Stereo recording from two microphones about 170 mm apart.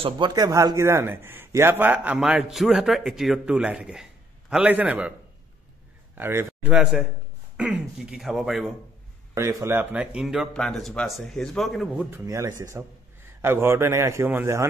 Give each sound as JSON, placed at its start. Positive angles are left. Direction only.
{"t": 0.0, "sound": "a man's voice", "side_deg": -25}
{"t": 6.1, "sound": "a man's voice", "side_deg": -10}
{"t": 9.3, "sound": "a man's voice", "side_deg": -20}
{"t": 12.1, "sound": "a man's voice", "side_deg": -15}